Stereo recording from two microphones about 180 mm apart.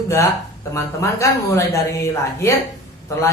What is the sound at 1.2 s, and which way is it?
Speech, 15° left (ahead or behind).